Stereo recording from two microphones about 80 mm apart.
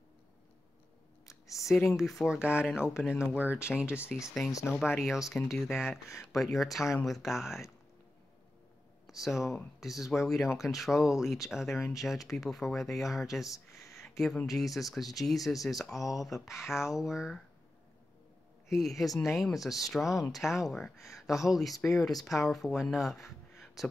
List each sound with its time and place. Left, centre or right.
1.2 s a sound: left
2.0 s speech: centre
3.7 s speech: centre
9.0 s speech: centre
18.7 s speech: centre